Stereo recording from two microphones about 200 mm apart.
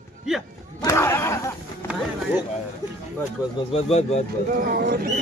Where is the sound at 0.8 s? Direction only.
15° left (ahead or behind).